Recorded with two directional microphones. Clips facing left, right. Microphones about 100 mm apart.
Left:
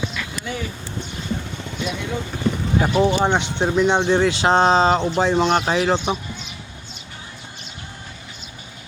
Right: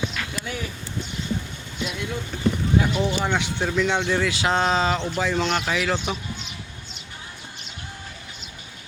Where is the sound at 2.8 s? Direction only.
50° left (ahead or behind).